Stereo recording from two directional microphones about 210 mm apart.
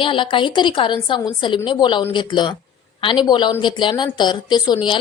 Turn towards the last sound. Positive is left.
turn(degrees=20)  # may be behind; listen again after turning